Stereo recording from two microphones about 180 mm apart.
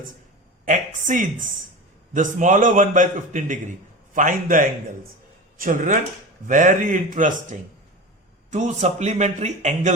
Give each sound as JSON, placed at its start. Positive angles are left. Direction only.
{"t": 0.6, "sound": "a man's voice", "side_deg": -45}